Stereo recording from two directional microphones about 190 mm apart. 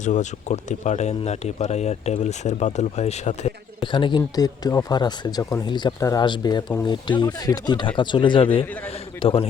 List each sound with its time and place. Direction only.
0.0 s speech: 40° left (ahead or behind)
3.9 s speech: 25° left (ahead or behind)